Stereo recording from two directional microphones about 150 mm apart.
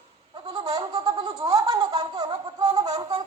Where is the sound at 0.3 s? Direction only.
25° right (ahead or behind).